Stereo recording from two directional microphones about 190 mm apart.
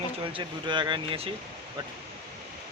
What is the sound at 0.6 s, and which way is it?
Speech, 25° right (ahead or behind).